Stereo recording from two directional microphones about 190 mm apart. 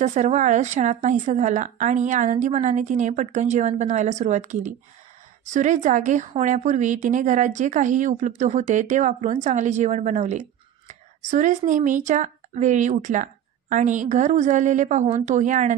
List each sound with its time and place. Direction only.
0.0 s speech: 35° right (ahead or behind)